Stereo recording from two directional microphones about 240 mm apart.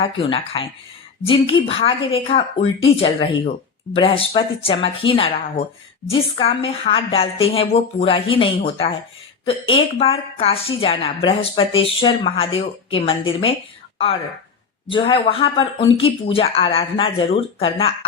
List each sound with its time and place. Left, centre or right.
0.0 s a woman's voice: left
14.8 s a woman's voice: left